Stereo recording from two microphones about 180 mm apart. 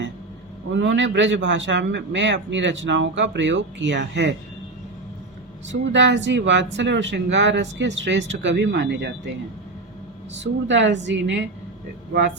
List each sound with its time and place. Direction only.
0.7 s a man's voice: 90° right
5.6 s speech: 90° right
10.3 s a man's voice: 90° right